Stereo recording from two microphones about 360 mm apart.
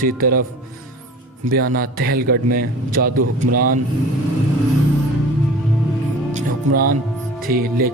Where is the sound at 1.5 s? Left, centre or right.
Right.